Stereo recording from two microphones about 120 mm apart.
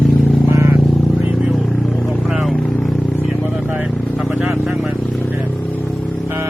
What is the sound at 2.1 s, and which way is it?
Vehicle, centre (ahead or behind).